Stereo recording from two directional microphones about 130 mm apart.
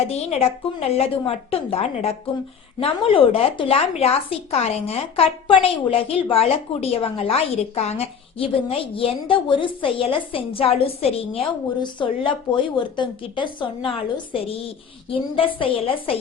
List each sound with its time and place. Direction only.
0.1 s a woman's voice: 55° left (ahead or behind); by 13.9 s 40° left (ahead or behind)
15.1 s a woman's voice: 40° left (ahead or behind)